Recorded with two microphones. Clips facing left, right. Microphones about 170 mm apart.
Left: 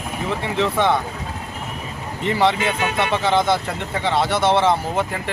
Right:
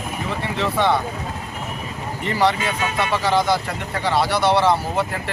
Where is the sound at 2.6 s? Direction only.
60° left (ahead or behind).